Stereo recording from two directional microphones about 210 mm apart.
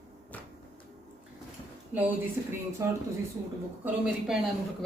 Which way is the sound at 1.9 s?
5° right (ahead or behind).